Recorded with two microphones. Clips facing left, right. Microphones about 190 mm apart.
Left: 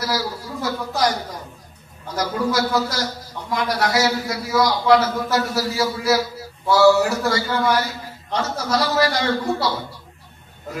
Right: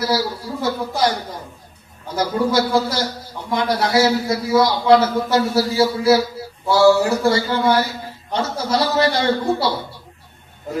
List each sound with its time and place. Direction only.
0.0 s a man's voice: 25° right (ahead or behind)
2.1 s a man's voice: 30° right (ahead or behind)